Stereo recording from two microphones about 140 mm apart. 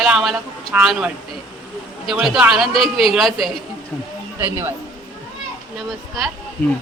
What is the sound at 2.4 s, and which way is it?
Speech, centre (ahead or behind).